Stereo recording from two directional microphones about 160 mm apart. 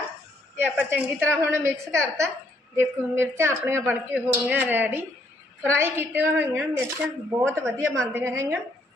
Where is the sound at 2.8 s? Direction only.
15° right (ahead or behind).